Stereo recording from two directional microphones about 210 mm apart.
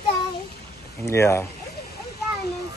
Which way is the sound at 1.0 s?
15° left (ahead or behind).